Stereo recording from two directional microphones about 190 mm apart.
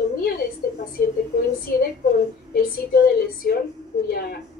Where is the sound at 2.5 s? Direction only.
55° left (ahead or behind).